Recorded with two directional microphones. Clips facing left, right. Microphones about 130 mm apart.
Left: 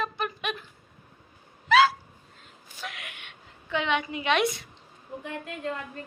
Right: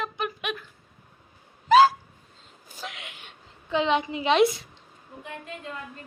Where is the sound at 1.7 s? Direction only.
40° right (ahead or behind).